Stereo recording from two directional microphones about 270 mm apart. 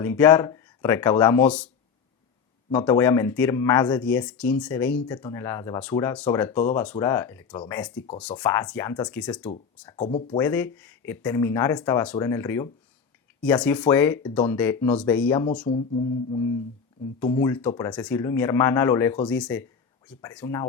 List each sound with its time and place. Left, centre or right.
0.0 s speech: centre
2.7 s speech: centre
9.8 s speech: centre
10.4 s speech: centre
15.7 s music: left
17.2 s speech: centre